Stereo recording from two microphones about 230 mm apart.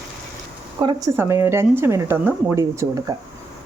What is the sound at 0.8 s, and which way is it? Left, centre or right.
Speech, centre.